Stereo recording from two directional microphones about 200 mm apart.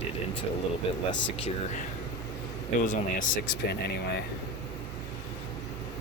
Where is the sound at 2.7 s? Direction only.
40° left (ahead or behind).